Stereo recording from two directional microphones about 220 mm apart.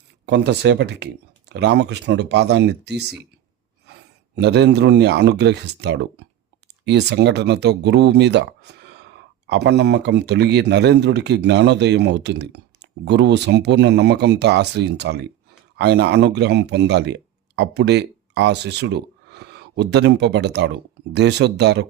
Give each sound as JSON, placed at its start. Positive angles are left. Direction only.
{"t": 0.3, "sound": "speech", "side_deg": -50}